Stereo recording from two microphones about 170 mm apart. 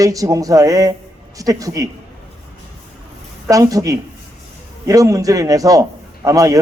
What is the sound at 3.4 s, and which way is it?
A man's voice, 20° right (ahead or behind).